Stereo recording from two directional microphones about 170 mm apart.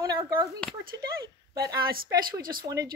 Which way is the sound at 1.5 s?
20° right (ahead or behind).